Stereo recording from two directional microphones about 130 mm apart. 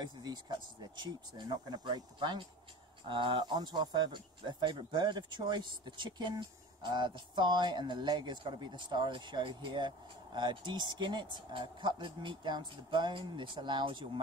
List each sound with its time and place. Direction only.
0.0 s speech: 35° right (ahead or behind)